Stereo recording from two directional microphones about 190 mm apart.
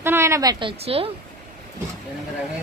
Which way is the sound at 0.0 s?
15° right (ahead or behind).